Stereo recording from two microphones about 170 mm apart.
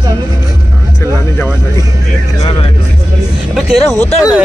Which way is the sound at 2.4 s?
30° left (ahead or behind).